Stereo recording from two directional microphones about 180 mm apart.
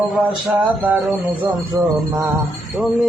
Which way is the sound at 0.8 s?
5° right (ahead or behind).